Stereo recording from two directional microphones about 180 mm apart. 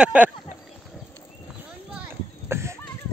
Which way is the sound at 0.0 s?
10° right (ahead or behind).